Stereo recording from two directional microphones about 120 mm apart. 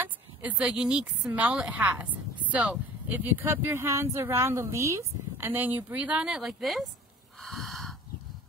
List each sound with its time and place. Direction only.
0.0 s speech: 10° right (ahead or behind)
7.3 s snort: centre (ahead or behind)